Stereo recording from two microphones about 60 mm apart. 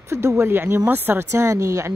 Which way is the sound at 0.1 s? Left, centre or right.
Right.